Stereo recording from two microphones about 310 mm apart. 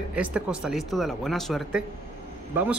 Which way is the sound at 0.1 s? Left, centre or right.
Centre.